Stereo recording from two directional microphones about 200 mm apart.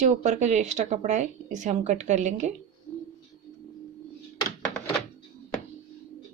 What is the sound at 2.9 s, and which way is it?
Bird, 10° left (ahead or behind).